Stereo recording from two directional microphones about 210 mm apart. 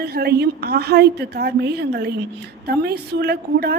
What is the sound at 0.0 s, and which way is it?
A woman's voice, 50° right (ahead or behind).